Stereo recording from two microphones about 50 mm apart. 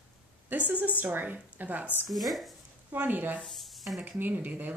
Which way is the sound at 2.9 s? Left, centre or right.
Right.